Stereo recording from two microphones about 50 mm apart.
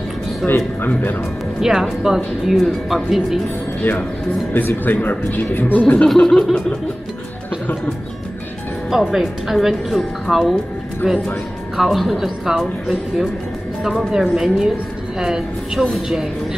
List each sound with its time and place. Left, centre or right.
0.4 s a woman's voice: centre
4.8 s speech: left
6.1 s chuckle: centre
8.9 s a woman's voice: centre
13.8 s speech: centre